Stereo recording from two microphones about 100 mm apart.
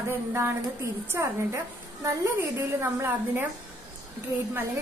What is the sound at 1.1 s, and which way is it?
A woman's voice, 25° right (ahead or behind).